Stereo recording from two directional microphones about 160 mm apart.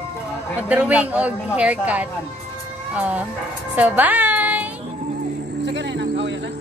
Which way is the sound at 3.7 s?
10° right (ahead or behind).